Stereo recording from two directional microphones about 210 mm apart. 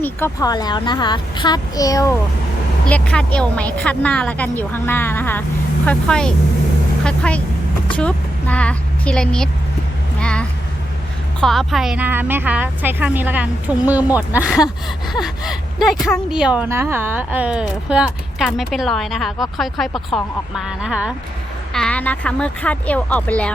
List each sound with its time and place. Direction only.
0.0 s a child's voice: 15° left (ahead or behind)
2.9 s a woman's voice: 5° left (ahead or behind)
10.2 s a sound: 5° left (ahead or behind)
11.3 s a woman's voice: centre (ahead or behind)